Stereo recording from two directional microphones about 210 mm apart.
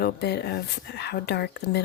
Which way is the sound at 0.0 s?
50° left (ahead or behind).